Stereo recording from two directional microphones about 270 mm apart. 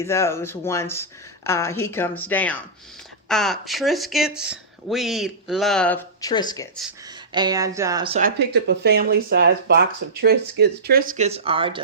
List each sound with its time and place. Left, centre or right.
0.0 s a woman's voice: centre
7.3 s speech: centre
8.2 s speech: right; by 11.8 s centre